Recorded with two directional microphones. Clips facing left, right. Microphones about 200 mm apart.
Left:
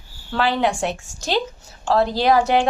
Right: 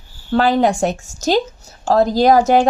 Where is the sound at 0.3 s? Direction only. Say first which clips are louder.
Right 6 dB; 45° right (ahead or behind).